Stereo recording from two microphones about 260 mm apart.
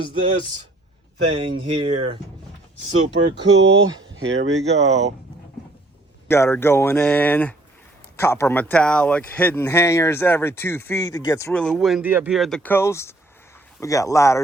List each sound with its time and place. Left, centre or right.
0.0 s speech: centre
3.3 s speech: right
6.2 s speech: centre